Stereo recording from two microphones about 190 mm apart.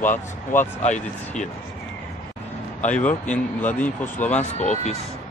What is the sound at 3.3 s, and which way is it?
A man's voice, 10° left (ahead or behind).